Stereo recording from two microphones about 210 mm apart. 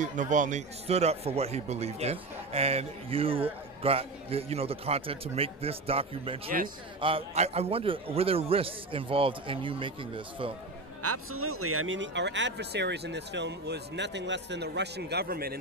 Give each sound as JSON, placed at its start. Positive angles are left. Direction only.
{"t": 0.0, "sound": "a man's voice", "side_deg": -35}
{"t": 11.0, "sound": "speech", "side_deg": -90}